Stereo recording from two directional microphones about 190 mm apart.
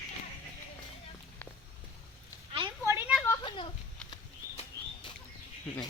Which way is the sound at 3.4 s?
25° left (ahead or behind).